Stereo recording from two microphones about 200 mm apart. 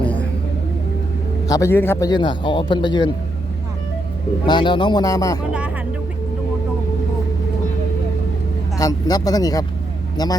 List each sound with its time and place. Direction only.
0.0 s a sound: 5° left (ahead or behind)
1.5 s speech: 15° left (ahead or behind)
4.4 s speech: 25° left (ahead or behind)
5.5 s music: 5° right (ahead or behind)
8.8 s speech: 20° left (ahead or behind)